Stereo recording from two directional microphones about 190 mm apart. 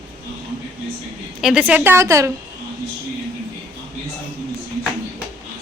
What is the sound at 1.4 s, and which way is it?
Speech, 5° right (ahead or behind).